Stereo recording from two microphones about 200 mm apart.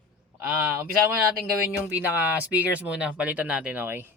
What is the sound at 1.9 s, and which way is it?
Speech, 10° right (ahead or behind).